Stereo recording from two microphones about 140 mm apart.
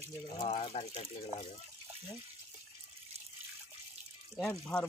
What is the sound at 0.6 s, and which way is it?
Speech, 45° left (ahead or behind).